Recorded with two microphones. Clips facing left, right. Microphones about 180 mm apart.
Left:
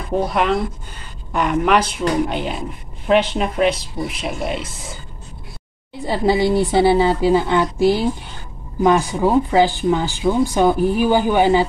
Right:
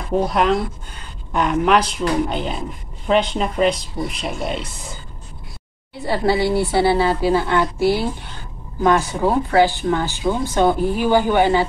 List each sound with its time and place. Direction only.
0.2 s speech: centre (ahead or behind)
6.0 s speech: 15° left (ahead or behind)